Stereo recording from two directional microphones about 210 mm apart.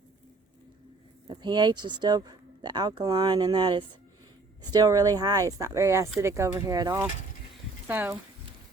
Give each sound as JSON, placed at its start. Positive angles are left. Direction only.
{"t": 1.3, "sound": "speech", "side_deg": -20}